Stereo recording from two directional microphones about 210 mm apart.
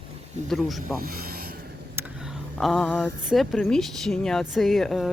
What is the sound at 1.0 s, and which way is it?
Mechanisms, 45° right (ahead or behind).